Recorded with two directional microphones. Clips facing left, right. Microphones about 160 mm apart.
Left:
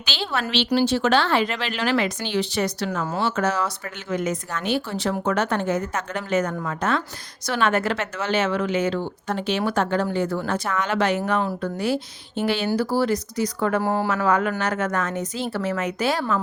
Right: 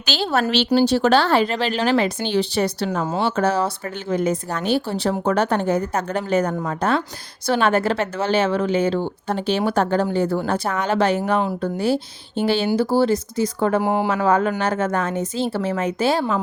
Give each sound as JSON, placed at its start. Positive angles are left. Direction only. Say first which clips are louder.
{"t": 0.0, "sound": "a woman's voice", "louder": "right 6 dB", "side_deg": -40}
{"t": 14.1, "sound": "a woman's voice", "louder": "right 3 dB", "side_deg": -30}